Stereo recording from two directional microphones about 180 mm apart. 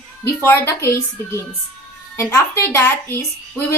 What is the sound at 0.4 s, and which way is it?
Speech, 15° left (ahead or behind).